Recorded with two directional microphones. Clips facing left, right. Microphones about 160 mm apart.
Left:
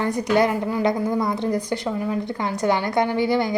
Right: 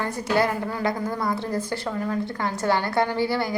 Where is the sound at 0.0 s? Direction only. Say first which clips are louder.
Left 4 dB; 20° left (ahead or behind).